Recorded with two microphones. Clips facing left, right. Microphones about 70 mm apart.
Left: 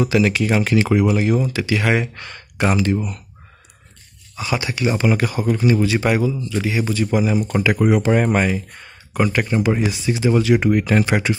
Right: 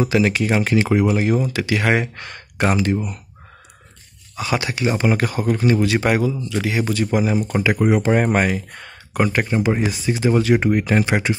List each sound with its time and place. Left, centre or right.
0.0 s speech: right
0.5 s speech: right
1.5 s speech: right
4.4 s speech: right
4.8 s speech: right
7.5 s speech: right
8.0 s speech: right
8.4 s speech: right
9.2 s speech: right
9.8 s speech: right